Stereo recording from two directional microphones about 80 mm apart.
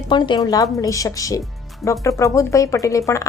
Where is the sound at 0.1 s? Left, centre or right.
Left.